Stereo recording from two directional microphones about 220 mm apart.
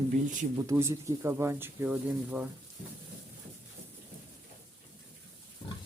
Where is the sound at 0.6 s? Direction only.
15° right (ahead or behind).